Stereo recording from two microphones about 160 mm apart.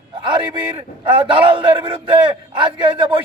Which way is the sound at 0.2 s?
30° right (ahead or behind).